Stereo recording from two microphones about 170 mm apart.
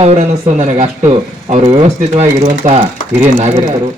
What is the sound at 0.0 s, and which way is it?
Speech, 40° right (ahead or behind).